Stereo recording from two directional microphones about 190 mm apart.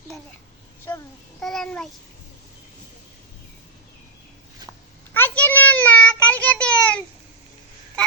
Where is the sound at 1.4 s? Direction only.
Centre (ahead or behind).